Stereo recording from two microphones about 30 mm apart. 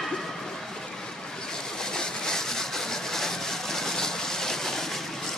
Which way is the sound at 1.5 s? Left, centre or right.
Left.